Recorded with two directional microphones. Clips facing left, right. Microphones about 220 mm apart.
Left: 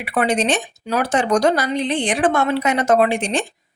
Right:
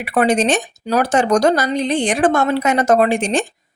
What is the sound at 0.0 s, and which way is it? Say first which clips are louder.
Speech: right 4 dB; 40° right (ahead or behind).